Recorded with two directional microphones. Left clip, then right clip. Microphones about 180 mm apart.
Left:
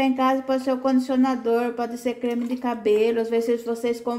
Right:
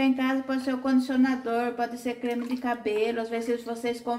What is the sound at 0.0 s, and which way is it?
Speech, 50° left (ahead or behind).